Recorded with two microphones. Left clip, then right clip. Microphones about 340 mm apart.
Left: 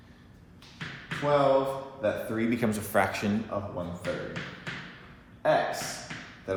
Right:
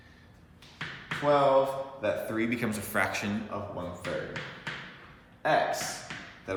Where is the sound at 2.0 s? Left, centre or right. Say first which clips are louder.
Left 1 dB; centre.